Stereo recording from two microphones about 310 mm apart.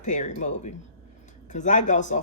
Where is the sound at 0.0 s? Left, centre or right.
Left.